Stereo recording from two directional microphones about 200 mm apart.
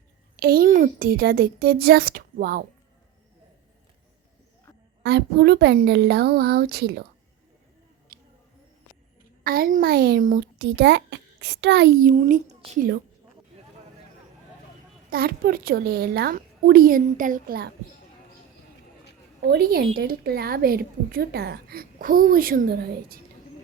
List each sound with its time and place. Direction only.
0.3 s a woman's voice: 50° right (ahead or behind)
5.0 s a woman's voice: 55° right (ahead or behind)
8.1 s a sound: 45° right (ahead or behind)
9.4 s a woman's voice: 45° right (ahead or behind)
15.1 s a woman's voice: 50° right (ahead or behind)
19.5 s a woman's voice: 50° right (ahead or behind)